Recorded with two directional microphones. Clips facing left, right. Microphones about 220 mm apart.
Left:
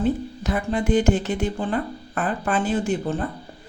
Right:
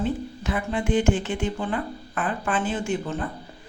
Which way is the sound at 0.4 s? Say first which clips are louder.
Left 3 dB; 40° left (ahead or behind).